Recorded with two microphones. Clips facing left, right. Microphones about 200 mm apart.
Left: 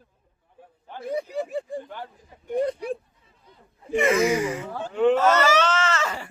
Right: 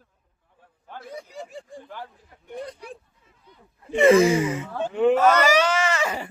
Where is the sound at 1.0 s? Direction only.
60° left (ahead or behind).